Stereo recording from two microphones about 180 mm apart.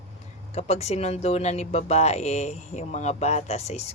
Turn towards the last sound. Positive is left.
turn(degrees=35)  # may be behind; listen again after turning